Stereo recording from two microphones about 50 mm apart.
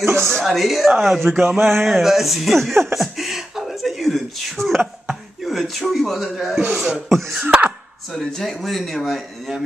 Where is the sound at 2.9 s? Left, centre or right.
Centre.